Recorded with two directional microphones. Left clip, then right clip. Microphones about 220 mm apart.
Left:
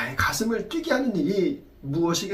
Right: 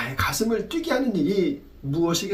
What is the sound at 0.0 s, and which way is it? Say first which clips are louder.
Speech: even; 5° right (ahead or behind).